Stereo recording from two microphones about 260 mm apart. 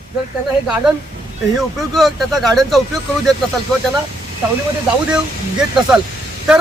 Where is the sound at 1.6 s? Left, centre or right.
Centre.